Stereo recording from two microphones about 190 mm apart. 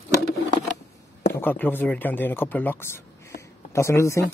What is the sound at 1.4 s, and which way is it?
Speech, 10° left (ahead or behind).